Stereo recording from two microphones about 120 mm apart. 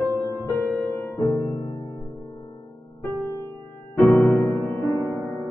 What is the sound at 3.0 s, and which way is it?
Music, 25° left (ahead or behind).